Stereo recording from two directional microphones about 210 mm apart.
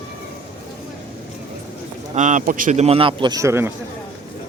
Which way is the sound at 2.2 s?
35° right (ahead or behind).